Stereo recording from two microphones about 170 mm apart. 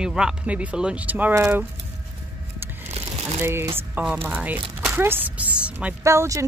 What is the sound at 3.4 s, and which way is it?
Speech, 15° right (ahead or behind).